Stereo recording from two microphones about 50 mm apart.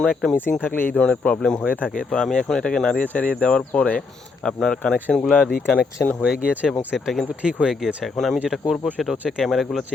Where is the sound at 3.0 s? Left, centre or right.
Left; by 5.3 s centre.